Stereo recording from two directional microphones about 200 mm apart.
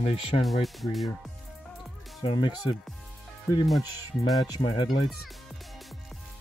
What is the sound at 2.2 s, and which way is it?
Speech, 25° left (ahead or behind).